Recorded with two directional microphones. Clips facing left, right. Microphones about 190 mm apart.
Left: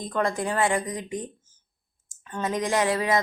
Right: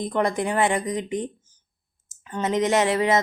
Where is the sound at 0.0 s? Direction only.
20° right (ahead or behind).